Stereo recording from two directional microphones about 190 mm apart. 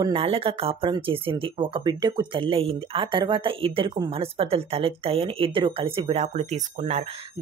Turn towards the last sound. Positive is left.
turn(degrees=-35)  # may be behind; listen again after turning